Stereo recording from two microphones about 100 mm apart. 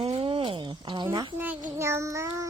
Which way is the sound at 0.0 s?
85° right.